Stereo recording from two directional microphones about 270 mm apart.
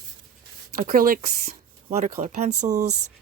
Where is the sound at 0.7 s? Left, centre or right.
Right.